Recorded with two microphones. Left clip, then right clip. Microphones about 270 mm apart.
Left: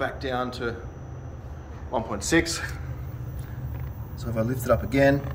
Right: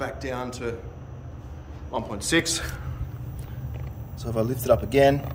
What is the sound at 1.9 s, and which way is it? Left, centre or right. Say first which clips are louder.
Speech: left 1 dB; centre.